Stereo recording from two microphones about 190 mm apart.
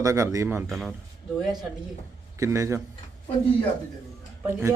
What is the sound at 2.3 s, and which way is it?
Speech, 15° right (ahead or behind).